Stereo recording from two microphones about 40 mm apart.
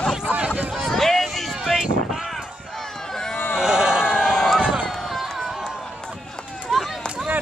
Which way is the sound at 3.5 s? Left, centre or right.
Centre.